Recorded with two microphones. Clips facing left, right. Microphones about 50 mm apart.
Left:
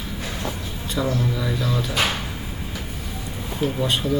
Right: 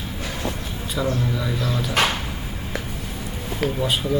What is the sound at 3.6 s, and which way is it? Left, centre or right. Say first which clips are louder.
Speech: even; right.